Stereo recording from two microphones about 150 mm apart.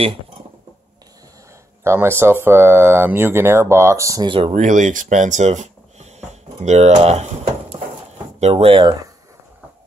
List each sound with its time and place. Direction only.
1.8 s speech: 15° right (ahead or behind)
4.3 s speech: 40° right (ahead or behind)
4.6 s speech: 55° right (ahead or behind); by 8.9 s 40° right (ahead or behind)